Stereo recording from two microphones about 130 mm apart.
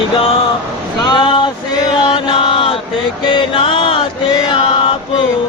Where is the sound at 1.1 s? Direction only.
40° left (ahead or behind).